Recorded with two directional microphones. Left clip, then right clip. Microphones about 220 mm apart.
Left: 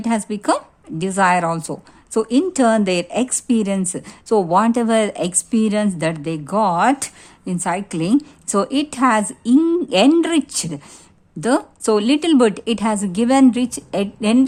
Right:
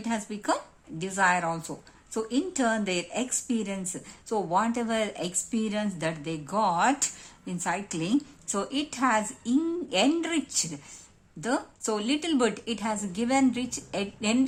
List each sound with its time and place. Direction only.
0.0 s speech: 40° left (ahead or behind)